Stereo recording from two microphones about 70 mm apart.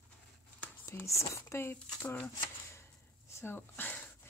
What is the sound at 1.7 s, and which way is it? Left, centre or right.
Speech, left.